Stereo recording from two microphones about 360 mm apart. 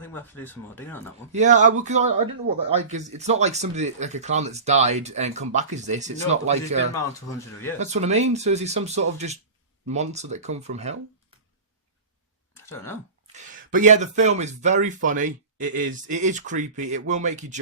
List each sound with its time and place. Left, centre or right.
0.0 s speech: centre
1.3 s speech: centre
6.9 s speech: centre
7.8 s speech: centre
12.6 s speech: centre
13.3 s speech: right